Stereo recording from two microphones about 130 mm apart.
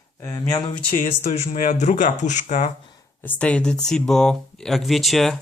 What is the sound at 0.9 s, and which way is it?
Speech, 70° left (ahead or behind).